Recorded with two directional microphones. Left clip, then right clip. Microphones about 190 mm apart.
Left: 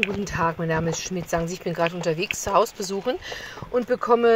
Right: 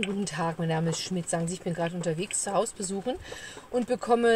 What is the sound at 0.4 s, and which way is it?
A woman's voice, 15° left (ahead or behind).